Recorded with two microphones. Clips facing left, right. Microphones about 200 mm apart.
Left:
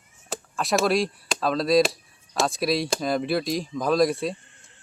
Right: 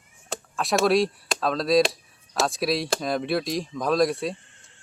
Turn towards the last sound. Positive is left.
turn(degrees=0)  # may be behind; listen again after turning